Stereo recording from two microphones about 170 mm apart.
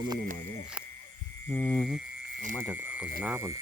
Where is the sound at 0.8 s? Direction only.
5° right (ahead or behind).